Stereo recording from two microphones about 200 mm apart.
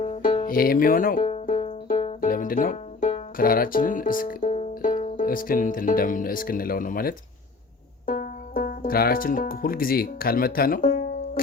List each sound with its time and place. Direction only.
0.0 s music: 35° left (ahead or behind)
0.5 s speech: 45° left (ahead or behind)